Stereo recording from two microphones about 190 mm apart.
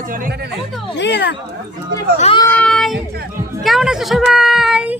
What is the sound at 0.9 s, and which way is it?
Speech, 65° left (ahead or behind).